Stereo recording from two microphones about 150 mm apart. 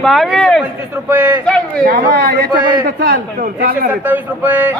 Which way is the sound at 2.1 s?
90° right.